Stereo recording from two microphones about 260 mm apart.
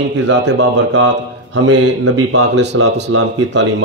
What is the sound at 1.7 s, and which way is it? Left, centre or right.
Speech, right.